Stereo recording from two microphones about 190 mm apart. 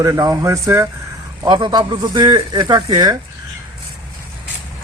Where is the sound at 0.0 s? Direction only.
15° right (ahead or behind).